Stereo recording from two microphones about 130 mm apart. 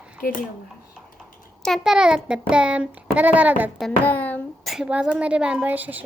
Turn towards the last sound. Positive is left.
turn(degrees=-15)  # may be behind; listen again after turning